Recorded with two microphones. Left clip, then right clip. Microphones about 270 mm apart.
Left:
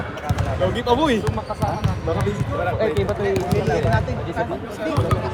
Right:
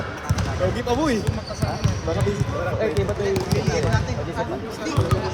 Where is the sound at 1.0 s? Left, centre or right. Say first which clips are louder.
Left 3 dB; centre.